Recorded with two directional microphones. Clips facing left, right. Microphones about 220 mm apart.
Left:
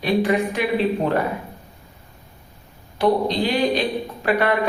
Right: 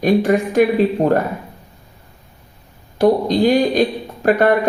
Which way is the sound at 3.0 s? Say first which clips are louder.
Right 5 dB; 45° right (ahead or behind).